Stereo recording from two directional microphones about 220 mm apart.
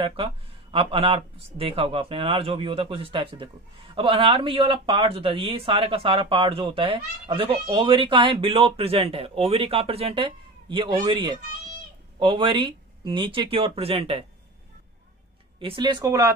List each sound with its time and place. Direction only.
0.0 s speech: 25° right (ahead or behind)
15.6 s speech: 20° right (ahead or behind)